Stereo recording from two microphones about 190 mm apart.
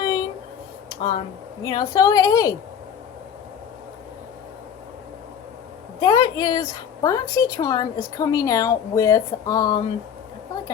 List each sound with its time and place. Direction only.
0.0 s a sound: 20° left (ahead or behind)
1.6 s a woman's voice: 20° left (ahead or behind)
6.0 s a woman's voice: 20° left (ahead or behind)